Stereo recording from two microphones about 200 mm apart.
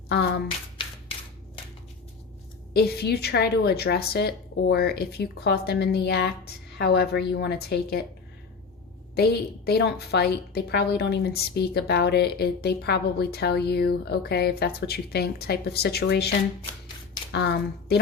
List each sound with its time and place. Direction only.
2.7 s a woman's voice: 50° left (ahead or behind)
9.1 s a woman's voice: 50° left (ahead or behind)
17.3 s speech: 55° left (ahead or behind)